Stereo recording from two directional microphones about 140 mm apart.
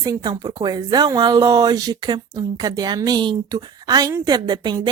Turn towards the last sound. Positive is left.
turn(degrees=-30)  # may be behind; listen again after turning